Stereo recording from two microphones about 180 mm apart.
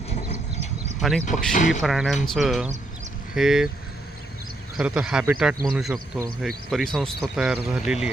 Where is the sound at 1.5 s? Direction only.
45° left (ahead or behind).